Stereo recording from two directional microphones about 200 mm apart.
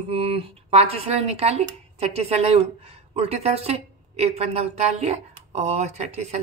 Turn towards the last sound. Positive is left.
turn(degrees=-35)  # may be behind; listen again after turning